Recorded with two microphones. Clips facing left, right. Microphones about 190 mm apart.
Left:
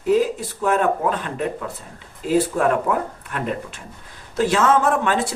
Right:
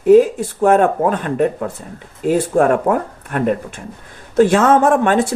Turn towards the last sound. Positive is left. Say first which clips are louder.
# right 6 dB
turn(degrees=-50)  # may be behind; listen again after turning